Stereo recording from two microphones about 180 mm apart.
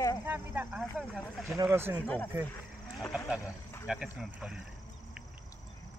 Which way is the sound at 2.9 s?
Centre (ahead or behind).